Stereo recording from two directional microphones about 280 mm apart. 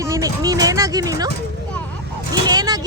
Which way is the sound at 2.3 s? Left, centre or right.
Centre.